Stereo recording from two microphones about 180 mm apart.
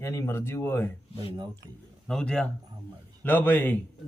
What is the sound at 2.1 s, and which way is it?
A man's voice, 5° left (ahead or behind).